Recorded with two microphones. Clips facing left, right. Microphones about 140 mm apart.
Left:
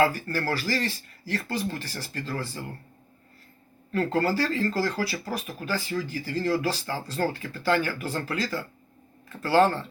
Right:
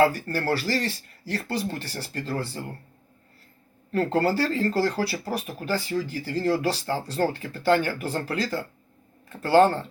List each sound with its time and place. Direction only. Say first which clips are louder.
0.0 s speech: right 2 dB; 40° right (ahead or behind)
3.9 s speech: right 2 dB; 30° right (ahead or behind)